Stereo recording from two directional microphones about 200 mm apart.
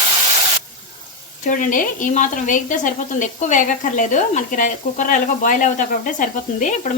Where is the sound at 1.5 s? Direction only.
40° left (ahead or behind).